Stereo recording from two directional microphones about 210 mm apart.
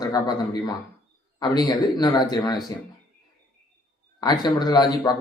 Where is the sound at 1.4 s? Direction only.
20° left (ahead or behind).